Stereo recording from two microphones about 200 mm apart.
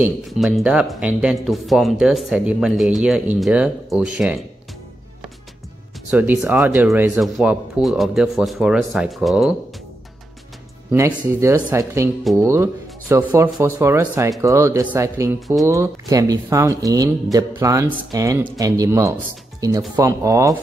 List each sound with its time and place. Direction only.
0.0 s speech: 5° right (ahead or behind)
6.0 s speech: 10° right (ahead or behind)
10.9 s speech: 10° right (ahead or behind)